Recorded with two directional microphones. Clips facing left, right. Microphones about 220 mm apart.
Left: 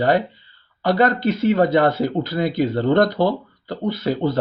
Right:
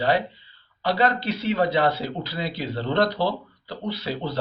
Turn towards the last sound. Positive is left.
turn(degrees=50)  # may be behind; listen again after turning